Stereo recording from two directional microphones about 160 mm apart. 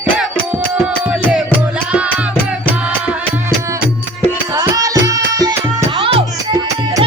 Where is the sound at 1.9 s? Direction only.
5° right (ahead or behind).